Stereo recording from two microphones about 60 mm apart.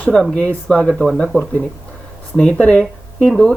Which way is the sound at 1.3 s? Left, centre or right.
Left.